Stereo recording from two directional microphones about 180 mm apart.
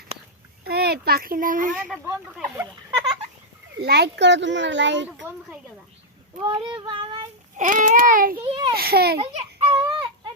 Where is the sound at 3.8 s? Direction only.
65° right (ahead or behind); by 5.1 s 85° right.